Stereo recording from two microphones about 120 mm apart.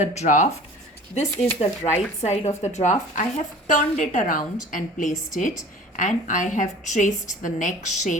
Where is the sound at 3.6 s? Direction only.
90° left.